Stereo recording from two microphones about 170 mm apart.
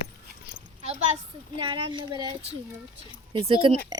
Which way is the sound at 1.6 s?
25° right (ahead or behind).